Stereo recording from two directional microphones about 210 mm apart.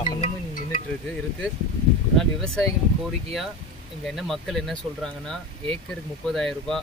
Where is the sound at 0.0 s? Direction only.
35° left (ahead or behind).